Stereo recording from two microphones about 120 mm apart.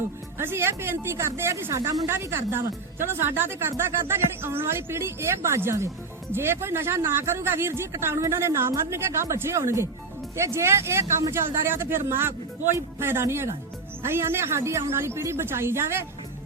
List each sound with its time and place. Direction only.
0.3 s a woman's voice: 20° right (ahead or behind)